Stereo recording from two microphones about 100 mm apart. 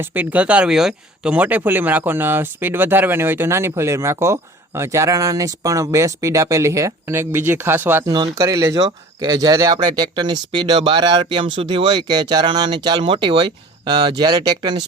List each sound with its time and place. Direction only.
0.0 s speech: 20° right (ahead or behind); by 14.8 s 40° right (ahead or behind)